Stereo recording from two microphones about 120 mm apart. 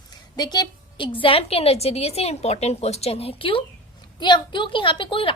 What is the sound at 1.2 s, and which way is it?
A woman's voice, 50° left (ahead or behind).